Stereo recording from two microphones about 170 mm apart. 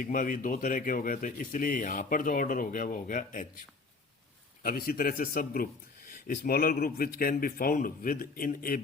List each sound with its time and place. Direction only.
0.0 s speech: 55° left (ahead or behind)
4.6 s a man's voice: 60° left (ahead or behind)